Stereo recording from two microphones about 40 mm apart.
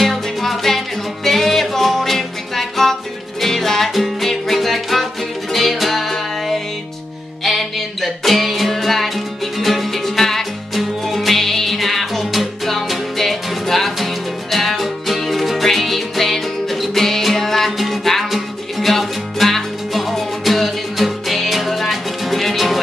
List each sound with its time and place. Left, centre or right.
0.0 s music: centre